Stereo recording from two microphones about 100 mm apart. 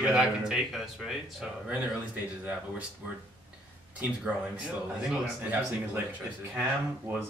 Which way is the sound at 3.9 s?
10° right (ahead or behind).